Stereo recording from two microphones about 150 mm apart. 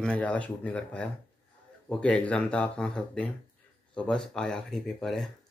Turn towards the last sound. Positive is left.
turn(degrees=5)  # may be behind; listen again after turning